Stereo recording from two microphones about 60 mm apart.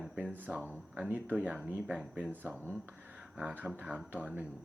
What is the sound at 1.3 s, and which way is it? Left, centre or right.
Speech, centre.